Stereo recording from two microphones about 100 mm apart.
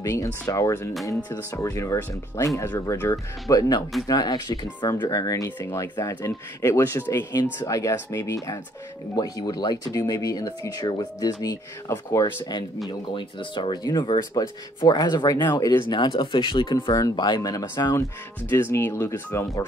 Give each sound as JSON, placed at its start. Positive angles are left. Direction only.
{"t": 0.0, "sound": "speech", "side_deg": 35}
{"t": 5.6, "sound": "speech", "side_deg": 25}
{"t": 7.6, "sound": "speech", "side_deg": 35}
{"t": 9.1, "sound": "speech", "side_deg": 40}
{"t": 11.9, "sound": "speech", "side_deg": 25}
{"t": 13.1, "sound": "speech", "side_deg": 55}
{"t": 16.9, "sound": "speech", "side_deg": 40}
{"t": 18.5, "sound": "speech", "side_deg": 25}